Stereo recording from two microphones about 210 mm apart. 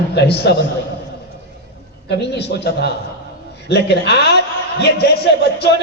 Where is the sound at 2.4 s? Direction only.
55° left (ahead or behind).